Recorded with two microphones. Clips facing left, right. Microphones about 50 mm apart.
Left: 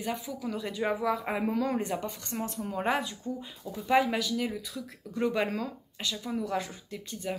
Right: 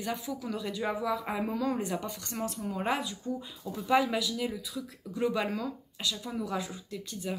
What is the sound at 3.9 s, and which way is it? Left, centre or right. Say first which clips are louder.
Speech: left 1 dB; left.